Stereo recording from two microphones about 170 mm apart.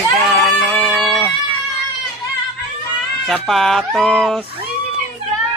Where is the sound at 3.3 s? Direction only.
Centre (ahead or behind).